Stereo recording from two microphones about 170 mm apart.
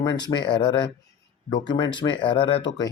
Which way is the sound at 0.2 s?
25° left (ahead or behind).